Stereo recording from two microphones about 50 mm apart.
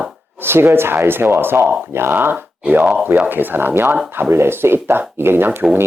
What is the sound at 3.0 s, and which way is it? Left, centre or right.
Speech, right.